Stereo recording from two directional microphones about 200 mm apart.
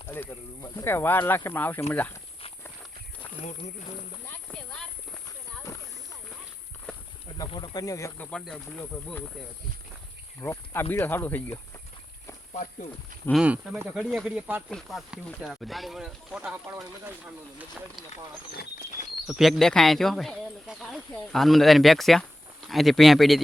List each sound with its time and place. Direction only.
0.1 s speech: 15° left (ahead or behind)
4.3 s clip-clop: 5° left (ahead or behind)
5.7 s a sound: 15° left (ahead or behind)
7.3 s speech: 20° left (ahead or behind)
8.3 s speech: 5° left (ahead or behind)
10.4 s speech: 15° left (ahead or behind)
13.4 s speech: 5° right (ahead or behind)
18.5 s speech: 50° left (ahead or behind)
19.3 s speech: centre (ahead or behind)